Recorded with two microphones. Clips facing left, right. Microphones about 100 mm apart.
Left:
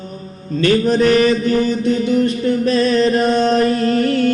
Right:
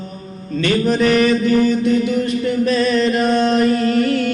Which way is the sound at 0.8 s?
35° left (ahead or behind).